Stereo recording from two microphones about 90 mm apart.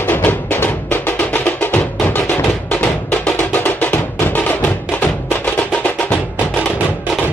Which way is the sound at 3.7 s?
15° left (ahead or behind).